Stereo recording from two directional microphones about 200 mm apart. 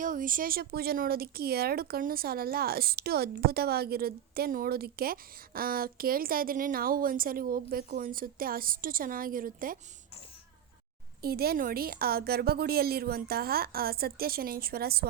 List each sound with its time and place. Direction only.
0.0 s speech: 40° right (ahead or behind)
11.2 s speech: 50° right (ahead or behind)